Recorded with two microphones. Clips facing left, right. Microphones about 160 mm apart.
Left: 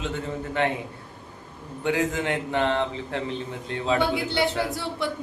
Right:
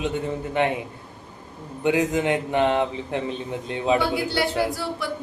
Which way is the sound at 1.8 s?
20° right (ahead or behind).